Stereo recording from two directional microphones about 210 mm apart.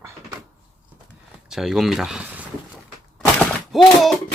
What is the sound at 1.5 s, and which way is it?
Speech, centre (ahead or behind).